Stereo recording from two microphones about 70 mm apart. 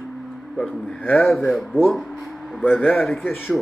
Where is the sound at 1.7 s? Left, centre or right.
Left.